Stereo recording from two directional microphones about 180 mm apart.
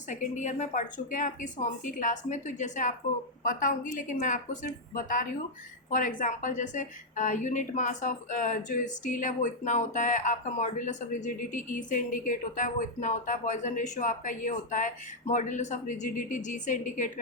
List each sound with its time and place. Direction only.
0.1 s a woman's voice: 45° left (ahead or behind)